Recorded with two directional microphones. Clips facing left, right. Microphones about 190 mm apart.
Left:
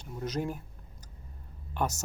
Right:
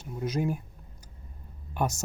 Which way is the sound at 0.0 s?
10° right (ahead or behind).